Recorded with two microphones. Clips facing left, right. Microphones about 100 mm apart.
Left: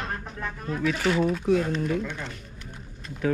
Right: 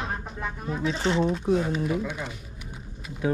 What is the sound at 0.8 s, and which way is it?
Speech, 25° right (ahead or behind).